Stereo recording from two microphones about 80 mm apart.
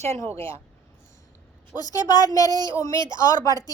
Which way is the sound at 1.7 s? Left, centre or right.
Left.